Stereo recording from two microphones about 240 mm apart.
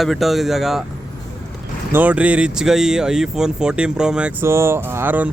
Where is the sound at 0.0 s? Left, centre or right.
Centre.